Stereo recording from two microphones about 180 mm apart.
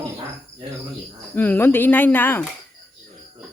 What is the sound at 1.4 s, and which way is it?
Speech, 10° left (ahead or behind).